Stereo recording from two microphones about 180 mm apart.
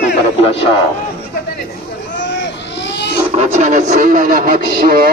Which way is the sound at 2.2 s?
80° left.